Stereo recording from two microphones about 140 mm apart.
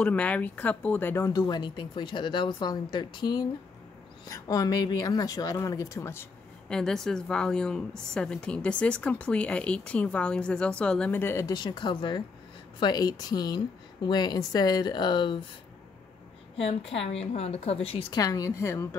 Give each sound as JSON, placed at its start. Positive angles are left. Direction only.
{"t": 0.0, "sound": "speech", "side_deg": 10}
{"t": 6.7, "sound": "a woman's voice", "side_deg": 5}
{"t": 16.5, "sound": "a woman's voice", "side_deg": 45}
{"t": 18.1, "sound": "speech", "side_deg": 25}